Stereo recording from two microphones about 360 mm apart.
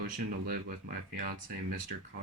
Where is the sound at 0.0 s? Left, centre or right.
Right.